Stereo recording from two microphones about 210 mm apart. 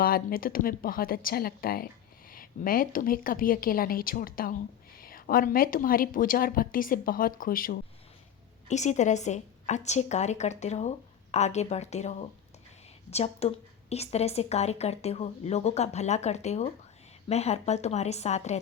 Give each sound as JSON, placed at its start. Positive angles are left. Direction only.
{"t": 0.0, "sound": "a woman's voice", "side_deg": 45}